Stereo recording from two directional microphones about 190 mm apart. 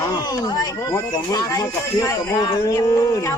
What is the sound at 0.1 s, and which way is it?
Speech, 20° left (ahead or behind).